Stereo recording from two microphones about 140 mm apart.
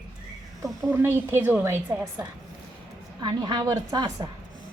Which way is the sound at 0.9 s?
15° right (ahead or behind).